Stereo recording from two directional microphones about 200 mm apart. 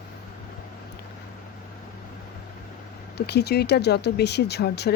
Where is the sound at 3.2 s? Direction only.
55° left (ahead or behind).